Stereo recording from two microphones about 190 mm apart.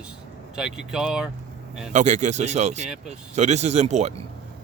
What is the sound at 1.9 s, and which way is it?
Speech, 40° right (ahead or behind).